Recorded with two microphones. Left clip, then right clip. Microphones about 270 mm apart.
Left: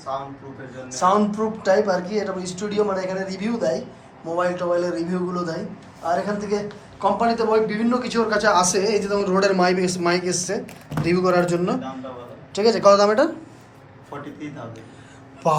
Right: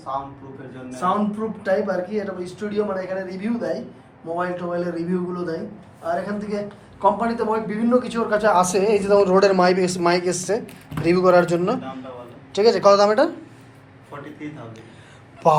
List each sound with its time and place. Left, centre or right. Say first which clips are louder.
0.9 s a man's voice: left 4 dB; centre
15.4 s a man's voice: right 4 dB; centre